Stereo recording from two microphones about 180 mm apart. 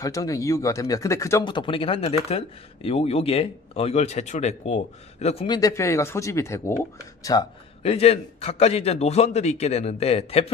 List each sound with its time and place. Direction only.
0.0 s speech: 20° left (ahead or behind)
1.4 s speech: 25° left (ahead or behind)
5.6 s speech: 15° left (ahead or behind)
7.8 s speech: 35° left (ahead or behind)